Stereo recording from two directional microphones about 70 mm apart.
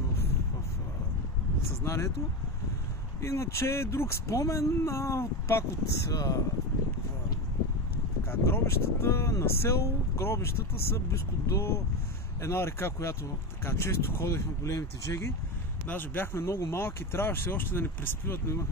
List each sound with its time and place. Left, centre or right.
1.9 s speech: left
3.2 s speech: left
6.1 s speech: left
8.3 s speech: left
15.9 s speech: left